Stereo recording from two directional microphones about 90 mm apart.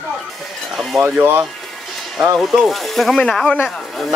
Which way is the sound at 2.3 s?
Centre (ahead or behind).